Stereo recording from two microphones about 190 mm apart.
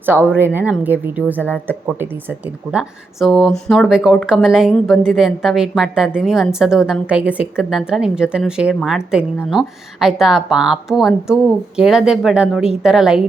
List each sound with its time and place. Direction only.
0.0 s speech: 10° right (ahead or behind)
2.7 s a woman's voice: centre (ahead or behind)